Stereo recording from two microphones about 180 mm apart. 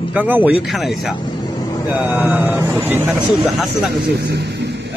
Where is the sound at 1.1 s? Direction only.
25° left (ahead or behind).